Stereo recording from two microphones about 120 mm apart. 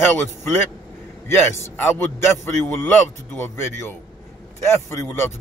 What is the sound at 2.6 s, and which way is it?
Speech, 20° left (ahead or behind).